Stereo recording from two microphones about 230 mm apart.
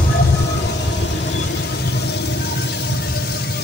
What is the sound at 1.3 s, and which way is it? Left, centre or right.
Vehicle, left.